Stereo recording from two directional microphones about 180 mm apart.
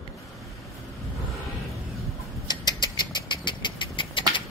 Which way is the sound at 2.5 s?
25° left (ahead or behind).